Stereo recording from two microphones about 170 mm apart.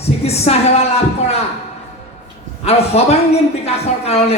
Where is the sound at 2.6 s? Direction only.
40° left (ahead or behind).